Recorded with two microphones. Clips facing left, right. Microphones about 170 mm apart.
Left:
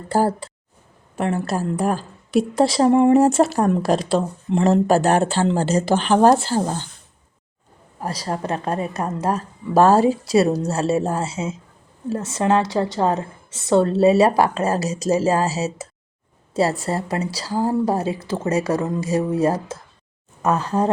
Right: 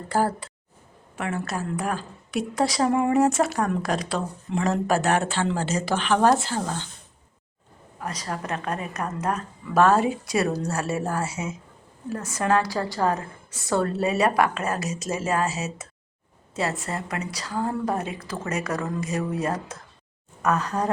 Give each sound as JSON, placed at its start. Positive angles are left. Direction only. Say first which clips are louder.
{"t": 0.1, "sound": "a woman's voice", "louder": "left 5 dB", "side_deg": 30}
{"t": 7.9, "sound": "a woman's voice", "louder": "left 5 dB", "side_deg": 30}